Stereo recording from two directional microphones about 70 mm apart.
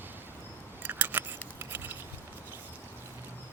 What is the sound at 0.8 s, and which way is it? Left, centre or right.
Scissors, right.